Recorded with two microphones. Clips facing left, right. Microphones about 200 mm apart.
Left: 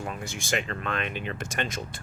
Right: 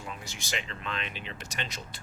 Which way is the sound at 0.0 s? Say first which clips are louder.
Left 7 dB; 50° left (ahead or behind).